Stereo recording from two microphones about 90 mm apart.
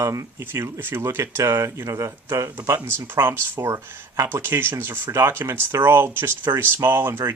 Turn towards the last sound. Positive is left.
turn(degrees=-25)  # may be behind; listen again after turning